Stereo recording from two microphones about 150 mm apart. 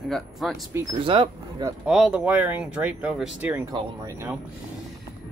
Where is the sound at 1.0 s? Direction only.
35° right (ahead or behind).